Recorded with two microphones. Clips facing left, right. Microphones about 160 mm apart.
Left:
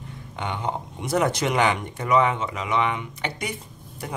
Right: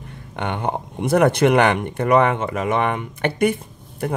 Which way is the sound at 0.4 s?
60° right (ahead or behind).